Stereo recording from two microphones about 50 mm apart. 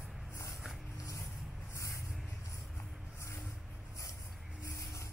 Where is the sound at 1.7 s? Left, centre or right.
Left.